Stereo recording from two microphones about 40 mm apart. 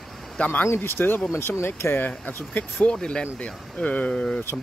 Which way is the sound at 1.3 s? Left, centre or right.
Left.